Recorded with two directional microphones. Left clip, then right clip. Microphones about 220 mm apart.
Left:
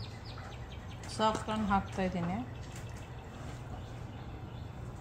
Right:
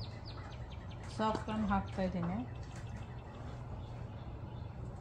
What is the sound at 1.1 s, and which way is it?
Speech, 45° left (ahead or behind).